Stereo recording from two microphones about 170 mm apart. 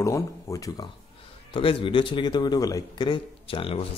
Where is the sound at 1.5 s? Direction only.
30° left (ahead or behind).